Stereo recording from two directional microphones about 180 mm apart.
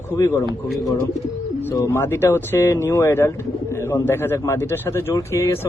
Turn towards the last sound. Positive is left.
turn(degrees=15)  # may be behind; listen again after turning